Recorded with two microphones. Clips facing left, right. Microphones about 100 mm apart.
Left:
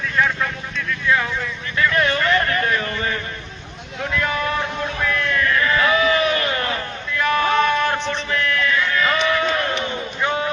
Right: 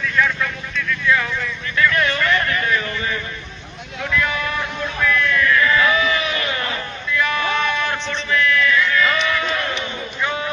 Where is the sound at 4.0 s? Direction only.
35° left (ahead or behind).